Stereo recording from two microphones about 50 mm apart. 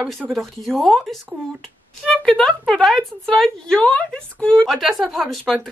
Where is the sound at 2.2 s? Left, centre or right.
Centre.